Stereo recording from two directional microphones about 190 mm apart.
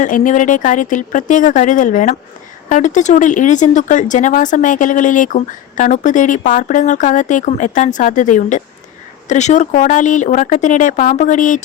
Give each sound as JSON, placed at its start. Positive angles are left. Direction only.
{"t": 0.0, "sound": "speech", "side_deg": 40}